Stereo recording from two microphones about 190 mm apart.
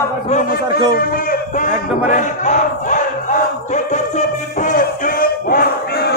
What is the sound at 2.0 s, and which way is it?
Battle cry, 40° left (ahead or behind).